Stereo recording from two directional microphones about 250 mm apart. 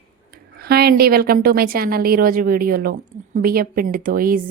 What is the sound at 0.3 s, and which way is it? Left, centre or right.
A woman's voice, right.